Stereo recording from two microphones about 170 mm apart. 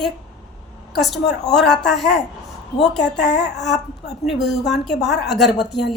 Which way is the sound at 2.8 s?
85° left.